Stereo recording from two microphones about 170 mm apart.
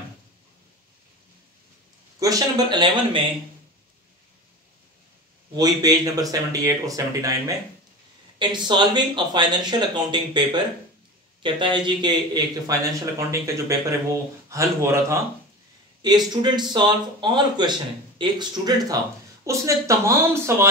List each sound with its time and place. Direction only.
2.1 s a man's voice: 20° right (ahead or behind)
5.6 s a man's voice: 25° right (ahead or behind)
16.3 s a man's voice: 25° right (ahead or behind)